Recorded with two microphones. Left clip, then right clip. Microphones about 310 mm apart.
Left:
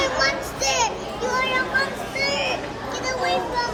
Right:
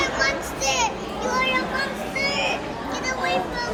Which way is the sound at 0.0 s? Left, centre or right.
Left.